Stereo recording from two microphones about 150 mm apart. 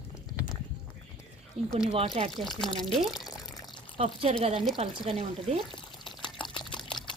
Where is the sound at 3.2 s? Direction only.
25° left (ahead or behind).